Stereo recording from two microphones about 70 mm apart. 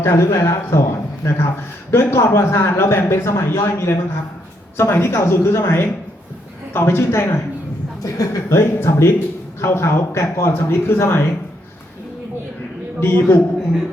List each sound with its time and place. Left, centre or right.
0.0 s a man's voice: left
8.0 s a man's voice: left
13.0 s a man's voice: left